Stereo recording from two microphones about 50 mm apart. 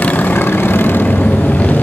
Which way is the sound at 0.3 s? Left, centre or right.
Left.